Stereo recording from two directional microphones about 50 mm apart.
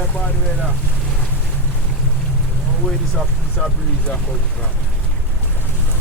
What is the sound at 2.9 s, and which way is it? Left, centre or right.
Speech, centre.